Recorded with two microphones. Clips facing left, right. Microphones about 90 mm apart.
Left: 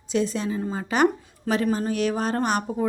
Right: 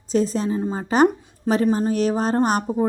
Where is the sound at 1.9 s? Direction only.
35° right (ahead or behind).